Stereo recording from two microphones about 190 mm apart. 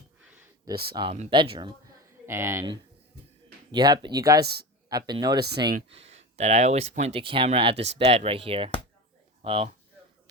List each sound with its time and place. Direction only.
1.1 s speech: 30° right (ahead or behind)
2.2 s speech: 15° right (ahead or behind)
5.4 s speech: 60° right (ahead or behind)
5.9 s speech: 35° right (ahead or behind)